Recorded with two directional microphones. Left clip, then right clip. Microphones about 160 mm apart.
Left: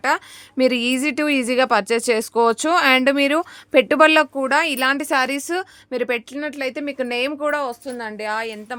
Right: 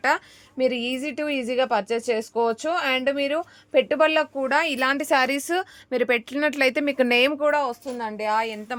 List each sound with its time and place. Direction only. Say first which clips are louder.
0.5 s a woman's voice: left 5 dB; 45° left (ahead or behind)
4.4 s a woman's voice: left 4 dB; 20° left (ahead or behind); by 6.2 s centre (ahead or behind)
6.3 s speech: right 4 dB; 15° right (ahead or behind)
7.3 s a woman's voice: even; 10° left (ahead or behind)